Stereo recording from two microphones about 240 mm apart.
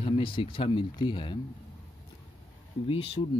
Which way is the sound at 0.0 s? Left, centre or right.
Left.